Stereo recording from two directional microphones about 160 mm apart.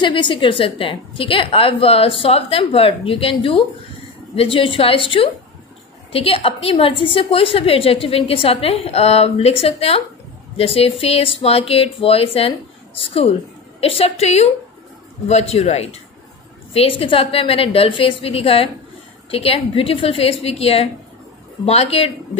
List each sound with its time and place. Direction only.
0.0 s a woman's voice: 30° left (ahead or behind)